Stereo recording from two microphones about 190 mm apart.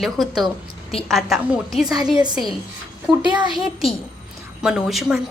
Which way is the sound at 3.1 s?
Centre (ahead or behind).